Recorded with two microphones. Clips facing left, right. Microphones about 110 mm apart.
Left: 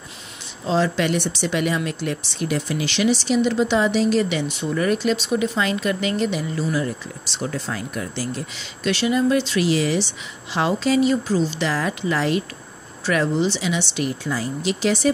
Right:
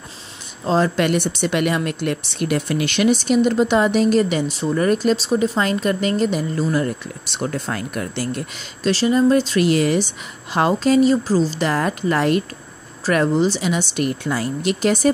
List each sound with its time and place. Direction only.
0.7 s speech: 45° right (ahead or behind)
8.8 s speech: 35° right (ahead or behind)